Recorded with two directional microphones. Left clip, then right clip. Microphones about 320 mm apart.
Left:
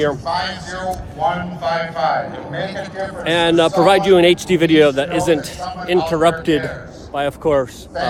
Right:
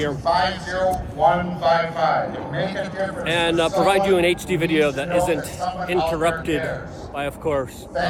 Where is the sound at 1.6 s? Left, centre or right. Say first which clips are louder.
Right 2 dB; centre.